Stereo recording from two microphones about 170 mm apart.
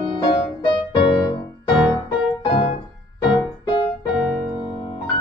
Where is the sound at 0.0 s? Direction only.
30° left (ahead or behind).